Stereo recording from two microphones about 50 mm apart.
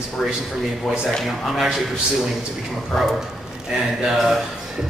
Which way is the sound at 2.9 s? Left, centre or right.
Centre.